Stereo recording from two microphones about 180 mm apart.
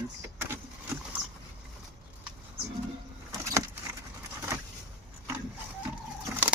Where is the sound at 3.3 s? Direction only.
20° right (ahead or behind).